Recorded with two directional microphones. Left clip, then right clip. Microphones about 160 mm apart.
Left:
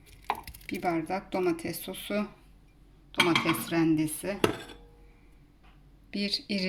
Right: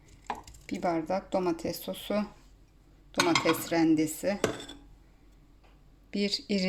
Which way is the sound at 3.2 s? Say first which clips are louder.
Right 1 dB; 30° right (ahead or behind).